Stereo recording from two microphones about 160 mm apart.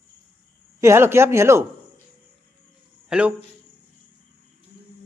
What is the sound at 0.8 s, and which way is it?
Speech, 15° right (ahead or behind).